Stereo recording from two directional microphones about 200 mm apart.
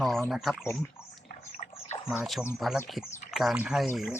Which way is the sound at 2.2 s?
Centre (ahead or behind).